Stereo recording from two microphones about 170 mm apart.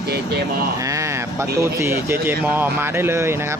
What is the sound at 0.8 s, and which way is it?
Speech, 20° right (ahead or behind).